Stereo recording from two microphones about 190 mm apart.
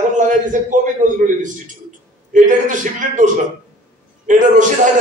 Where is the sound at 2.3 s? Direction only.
40° right (ahead or behind).